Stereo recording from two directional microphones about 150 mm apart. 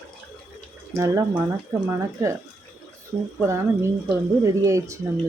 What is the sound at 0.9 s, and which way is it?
Speech, 25° right (ahead or behind).